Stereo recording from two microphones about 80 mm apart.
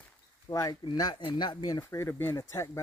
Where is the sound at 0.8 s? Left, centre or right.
Left.